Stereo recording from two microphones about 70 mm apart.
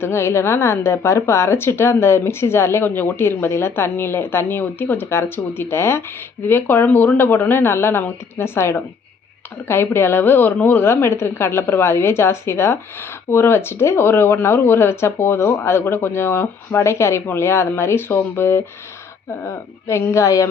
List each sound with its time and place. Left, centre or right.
0.0 s a woman's voice: left